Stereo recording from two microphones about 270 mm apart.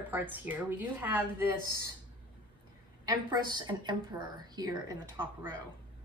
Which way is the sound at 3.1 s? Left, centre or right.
Centre.